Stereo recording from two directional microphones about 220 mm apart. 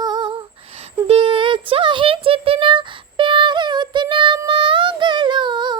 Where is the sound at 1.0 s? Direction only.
25° right (ahead or behind).